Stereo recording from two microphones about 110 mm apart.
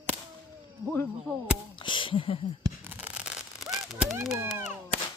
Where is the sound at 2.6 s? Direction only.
20° right (ahead or behind).